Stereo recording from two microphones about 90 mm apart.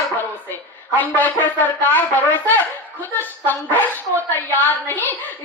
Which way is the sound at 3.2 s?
20° left (ahead or behind).